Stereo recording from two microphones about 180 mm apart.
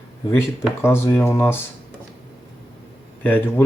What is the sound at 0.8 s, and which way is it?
Speech, 15° left (ahead or behind).